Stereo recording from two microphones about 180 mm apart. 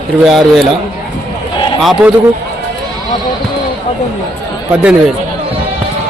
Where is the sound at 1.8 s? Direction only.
5° right (ahead or behind).